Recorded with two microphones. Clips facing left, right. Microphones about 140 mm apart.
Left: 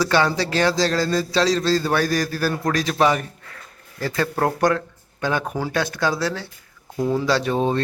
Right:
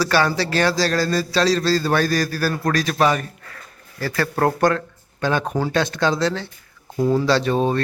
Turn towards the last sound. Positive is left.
turn(degrees=15)  # may be behind; listen again after turning